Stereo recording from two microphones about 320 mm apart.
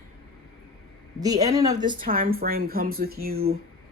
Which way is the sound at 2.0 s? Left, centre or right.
Right.